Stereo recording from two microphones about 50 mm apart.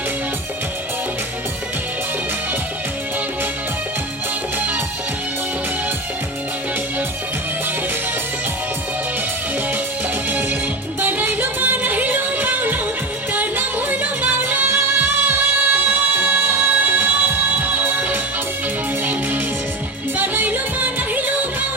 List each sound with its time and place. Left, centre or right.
10.2 s music: right
20.1 s music: right